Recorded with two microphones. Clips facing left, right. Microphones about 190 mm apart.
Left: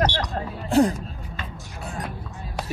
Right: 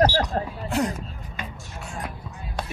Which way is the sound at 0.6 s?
30° left (ahead or behind).